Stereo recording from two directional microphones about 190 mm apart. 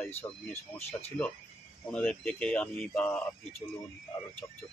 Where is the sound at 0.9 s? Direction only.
35° left (ahead or behind).